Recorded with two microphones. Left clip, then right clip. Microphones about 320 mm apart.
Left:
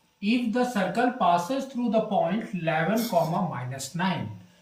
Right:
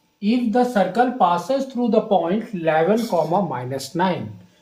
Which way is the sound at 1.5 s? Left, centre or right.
Centre.